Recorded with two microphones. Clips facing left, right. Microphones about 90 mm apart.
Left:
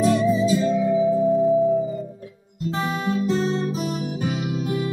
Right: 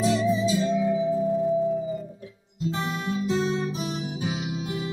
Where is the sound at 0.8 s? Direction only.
45° left (ahead or behind).